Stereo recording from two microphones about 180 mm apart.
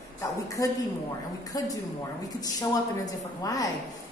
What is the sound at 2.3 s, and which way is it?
A woman's voice, 20° left (ahead or behind).